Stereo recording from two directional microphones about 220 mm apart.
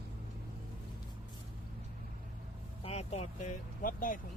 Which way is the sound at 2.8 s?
30° left (ahead or behind).